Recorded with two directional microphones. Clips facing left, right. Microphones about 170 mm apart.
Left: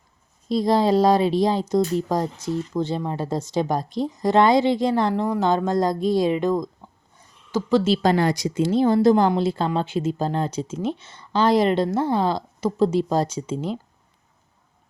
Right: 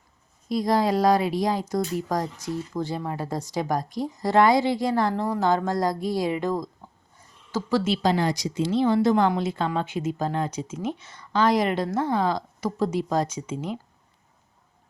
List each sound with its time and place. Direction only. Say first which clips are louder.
0.4 s speech: left 3 dB; 25° left (ahead or behind)
8.0 s speech: left 3 dB; 60° left (ahead or behind); by 13.7 s 30° left (ahead or behind)